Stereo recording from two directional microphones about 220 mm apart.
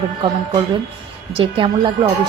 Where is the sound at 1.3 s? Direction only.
25° right (ahead or behind).